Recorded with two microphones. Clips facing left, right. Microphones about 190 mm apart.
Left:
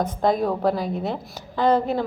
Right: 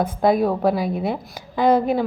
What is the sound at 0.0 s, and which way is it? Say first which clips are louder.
A woman's voice: right 3 dB; 10° right (ahead or behind).